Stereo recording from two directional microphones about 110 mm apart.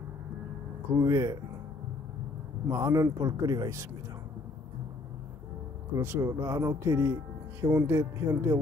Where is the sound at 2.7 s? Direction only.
30° right (ahead or behind).